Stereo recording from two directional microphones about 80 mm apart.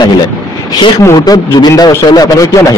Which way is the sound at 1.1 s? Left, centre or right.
Left.